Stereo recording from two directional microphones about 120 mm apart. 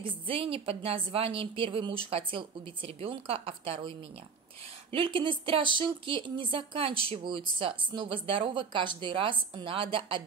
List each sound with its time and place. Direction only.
0.0 s speech: 50° right (ahead or behind)
4.9 s speech: 45° right (ahead or behind)